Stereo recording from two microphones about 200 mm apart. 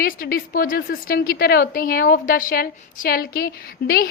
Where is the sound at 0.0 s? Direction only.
45° left (ahead or behind).